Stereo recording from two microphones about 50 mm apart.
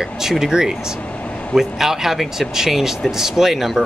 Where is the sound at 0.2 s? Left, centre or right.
Centre.